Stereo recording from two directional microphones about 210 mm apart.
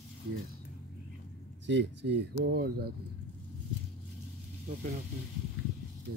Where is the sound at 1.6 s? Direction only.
55° right (ahead or behind).